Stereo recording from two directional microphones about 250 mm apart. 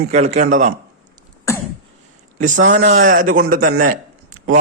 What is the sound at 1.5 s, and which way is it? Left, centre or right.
Throat clearing, centre.